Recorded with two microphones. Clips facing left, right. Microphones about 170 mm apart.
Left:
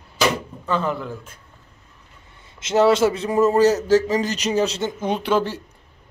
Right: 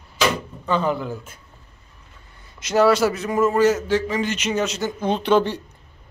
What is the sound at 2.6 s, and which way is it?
A man's voice, 25° left (ahead or behind).